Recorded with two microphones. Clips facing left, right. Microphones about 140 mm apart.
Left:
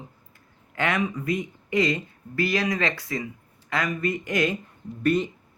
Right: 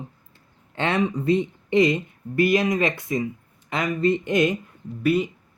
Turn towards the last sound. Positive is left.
turn(degrees=-10)  # may be behind; listen again after turning